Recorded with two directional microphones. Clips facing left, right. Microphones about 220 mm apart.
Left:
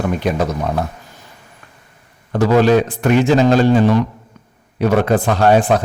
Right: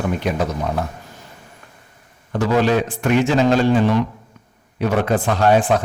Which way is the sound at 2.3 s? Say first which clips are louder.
Left 5 dB; 40° left (ahead or behind).